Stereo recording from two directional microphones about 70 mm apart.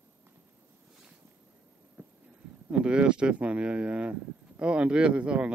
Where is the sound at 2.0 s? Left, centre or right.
Right.